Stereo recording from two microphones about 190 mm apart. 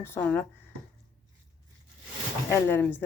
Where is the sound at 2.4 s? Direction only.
10° left (ahead or behind).